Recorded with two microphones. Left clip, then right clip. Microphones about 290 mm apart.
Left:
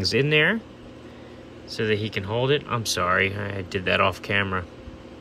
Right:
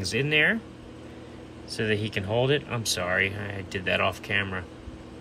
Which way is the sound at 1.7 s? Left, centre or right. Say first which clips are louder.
Left 3 dB; centre.